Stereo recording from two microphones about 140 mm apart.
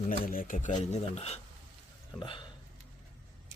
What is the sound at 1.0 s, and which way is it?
Speech, 50° left (ahead or behind).